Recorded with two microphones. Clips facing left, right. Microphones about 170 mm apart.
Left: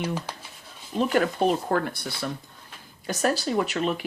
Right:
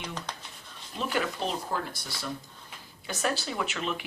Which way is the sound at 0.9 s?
50° left (ahead or behind).